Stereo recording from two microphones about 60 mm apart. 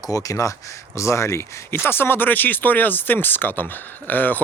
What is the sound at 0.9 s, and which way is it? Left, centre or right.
Speech, left.